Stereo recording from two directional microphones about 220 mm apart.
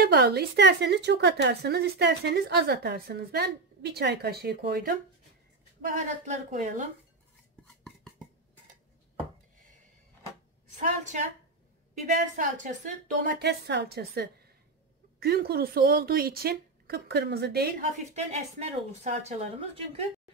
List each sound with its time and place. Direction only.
0.0 s a woman's voice: 45° right (ahead or behind)
7.6 s a sound: centre (ahead or behind)
10.8 s a woman's voice: 35° right (ahead or behind)
12.4 s a woman's voice: 35° right (ahead or behind)
13.4 s a woman's voice: 50° right (ahead or behind); by 20.1 s 25° right (ahead or behind)